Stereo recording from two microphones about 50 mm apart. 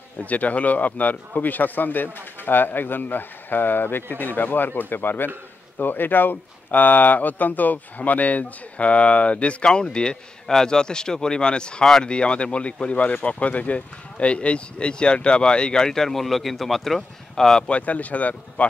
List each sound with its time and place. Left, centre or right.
0.2 s speech: left; by 17.6 s centre
17.6 s speech: left